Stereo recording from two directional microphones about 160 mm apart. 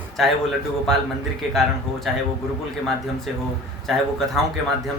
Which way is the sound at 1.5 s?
Centre (ahead or behind).